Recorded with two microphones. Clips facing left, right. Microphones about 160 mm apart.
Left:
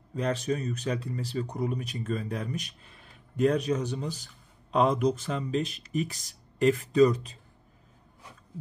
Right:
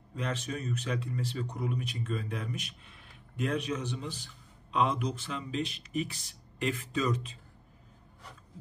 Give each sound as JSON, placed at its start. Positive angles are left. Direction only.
{"t": 0.1, "sound": "speech", "side_deg": 40}